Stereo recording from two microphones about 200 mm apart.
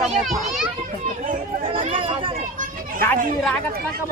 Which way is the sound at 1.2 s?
45° right (ahead or behind).